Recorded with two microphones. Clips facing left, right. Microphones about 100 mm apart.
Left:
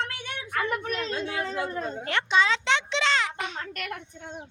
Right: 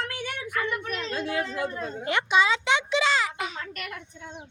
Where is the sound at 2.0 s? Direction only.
10° right (ahead or behind).